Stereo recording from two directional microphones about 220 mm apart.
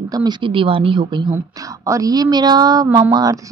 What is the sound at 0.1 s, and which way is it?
A woman's voice, 20° right (ahead or behind).